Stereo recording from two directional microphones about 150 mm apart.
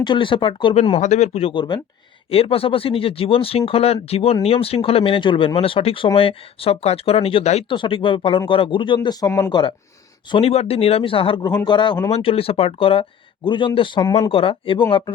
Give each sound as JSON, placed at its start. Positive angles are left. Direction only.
{"t": 0.0, "sound": "speech", "side_deg": 30}
{"t": 12.1, "sound": "speech", "side_deg": 40}